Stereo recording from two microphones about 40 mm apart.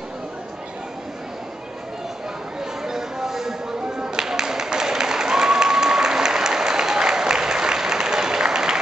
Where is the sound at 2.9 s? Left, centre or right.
Centre.